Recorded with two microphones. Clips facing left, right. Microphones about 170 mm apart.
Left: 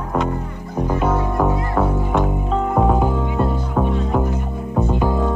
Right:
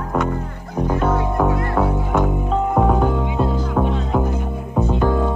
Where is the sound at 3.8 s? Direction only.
5° left (ahead or behind).